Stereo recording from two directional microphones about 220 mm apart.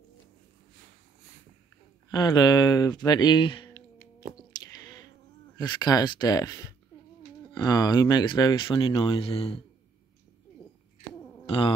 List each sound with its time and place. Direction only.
2.0 s speech: 20° left (ahead or behind)
3.1 s typing: 20° left (ahead or behind)
4.5 s a sound: 15° left (ahead or behind)
5.6 s speech: 20° left (ahead or behind)
11.4 s cat: 25° left (ahead or behind)